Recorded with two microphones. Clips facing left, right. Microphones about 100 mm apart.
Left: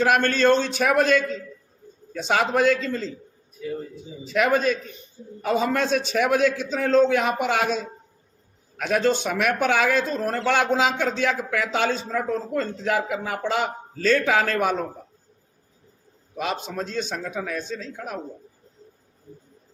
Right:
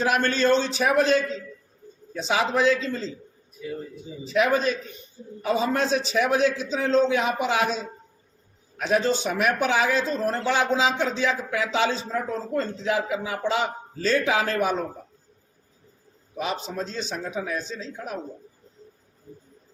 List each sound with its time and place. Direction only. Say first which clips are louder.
0.0 s a man's voice: left 3 dB; 55° left (ahead or behind)
4.3 s a man's voice: left 1 dB; 50° left (ahead or behind)
16.7 s a man's voice: left 2 dB; 50° left (ahead or behind)